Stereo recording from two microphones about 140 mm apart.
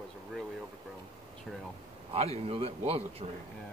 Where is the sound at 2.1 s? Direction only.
45° right (ahead or behind).